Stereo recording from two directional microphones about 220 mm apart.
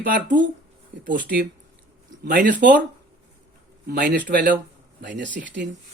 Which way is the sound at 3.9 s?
40° right (ahead or behind).